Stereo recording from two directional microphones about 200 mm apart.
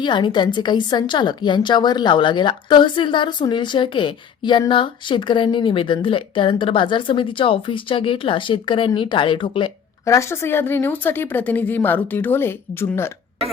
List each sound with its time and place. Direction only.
0.0 s a woman's voice: 25° left (ahead or behind)